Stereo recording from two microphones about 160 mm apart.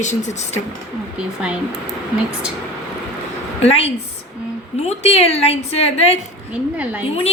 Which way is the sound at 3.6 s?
40° left (ahead or behind).